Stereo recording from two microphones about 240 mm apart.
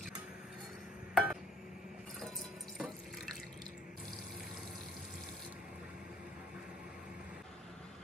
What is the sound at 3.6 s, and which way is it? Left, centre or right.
Water, centre.